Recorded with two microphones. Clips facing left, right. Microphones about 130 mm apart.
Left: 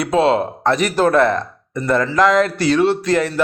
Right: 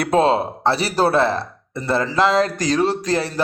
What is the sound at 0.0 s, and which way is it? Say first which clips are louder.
A man's voice: left 1 dB; 45° right (ahead or behind).